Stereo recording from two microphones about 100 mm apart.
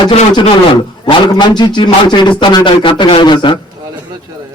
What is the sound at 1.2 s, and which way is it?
A man's voice, 45° left (ahead or behind).